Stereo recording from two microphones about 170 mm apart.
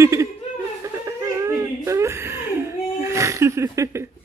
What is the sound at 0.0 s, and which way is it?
Laughter, 15° right (ahead or behind).